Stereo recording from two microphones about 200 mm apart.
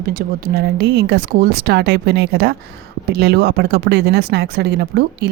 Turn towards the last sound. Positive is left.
turn(degrees=-55)  # may be behind; listen again after turning